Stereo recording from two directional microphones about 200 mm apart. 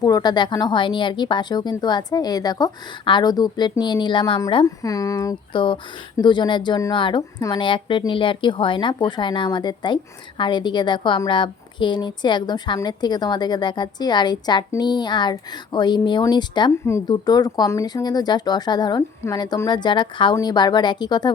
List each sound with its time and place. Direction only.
0.0 s a woman's voice: 20° left (ahead or behind)